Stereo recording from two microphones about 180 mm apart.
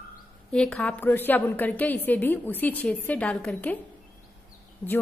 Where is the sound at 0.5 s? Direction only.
5° left (ahead or behind).